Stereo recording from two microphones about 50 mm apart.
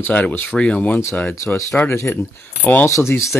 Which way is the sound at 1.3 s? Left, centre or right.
Left.